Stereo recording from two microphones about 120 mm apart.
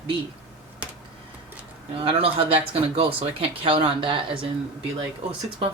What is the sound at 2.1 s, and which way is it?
Speech, 50° right (ahead or behind).